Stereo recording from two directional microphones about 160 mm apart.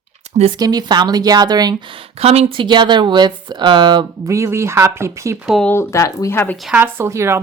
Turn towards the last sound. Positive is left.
turn(degrees=-15)  # may be behind; listen again after turning